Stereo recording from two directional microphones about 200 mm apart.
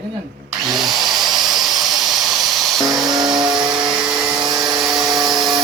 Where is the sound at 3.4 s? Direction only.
5° right (ahead or behind).